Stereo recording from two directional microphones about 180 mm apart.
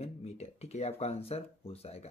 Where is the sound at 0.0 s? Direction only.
35° left (ahead or behind).